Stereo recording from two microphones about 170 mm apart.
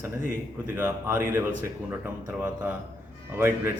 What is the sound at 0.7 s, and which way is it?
A man's voice, 10° right (ahead or behind).